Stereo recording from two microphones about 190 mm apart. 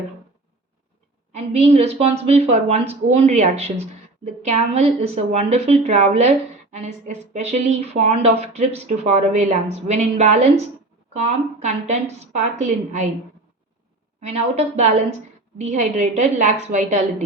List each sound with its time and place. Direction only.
1.3 s a woman's voice: 35° right (ahead or behind)
14.2 s a woman's voice: 35° right (ahead or behind)